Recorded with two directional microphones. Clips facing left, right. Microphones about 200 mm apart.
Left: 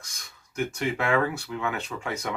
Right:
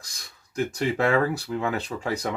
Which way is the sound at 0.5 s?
35° right (ahead or behind).